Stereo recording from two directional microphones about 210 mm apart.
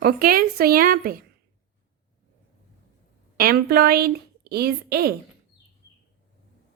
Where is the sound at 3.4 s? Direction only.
45° right (ahead or behind).